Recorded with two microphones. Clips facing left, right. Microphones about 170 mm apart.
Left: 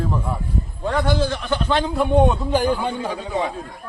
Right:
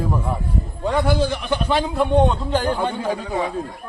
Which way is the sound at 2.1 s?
10° left (ahead or behind).